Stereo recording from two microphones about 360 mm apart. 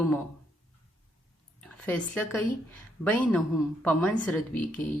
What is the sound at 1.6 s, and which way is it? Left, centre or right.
A woman's voice, centre.